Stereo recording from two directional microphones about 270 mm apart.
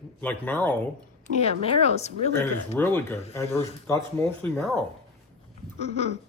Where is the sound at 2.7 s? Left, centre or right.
Centre.